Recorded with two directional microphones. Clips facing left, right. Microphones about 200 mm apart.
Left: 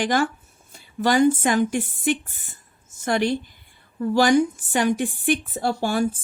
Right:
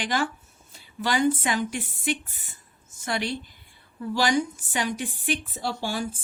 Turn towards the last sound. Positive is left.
turn(degrees=50)  # may be behind; listen again after turning